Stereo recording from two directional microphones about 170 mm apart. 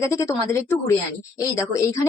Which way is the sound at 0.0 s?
15° left (ahead or behind).